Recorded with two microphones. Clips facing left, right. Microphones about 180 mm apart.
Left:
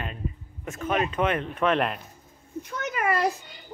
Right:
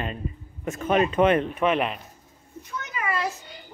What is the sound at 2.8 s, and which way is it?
Speech, 60° left (ahead or behind).